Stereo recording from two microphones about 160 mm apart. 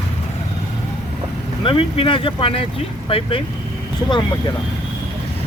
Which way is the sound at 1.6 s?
35° left (ahead or behind).